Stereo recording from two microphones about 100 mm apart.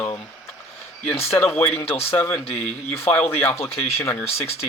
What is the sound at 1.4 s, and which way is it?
Speech, 20° left (ahead or behind).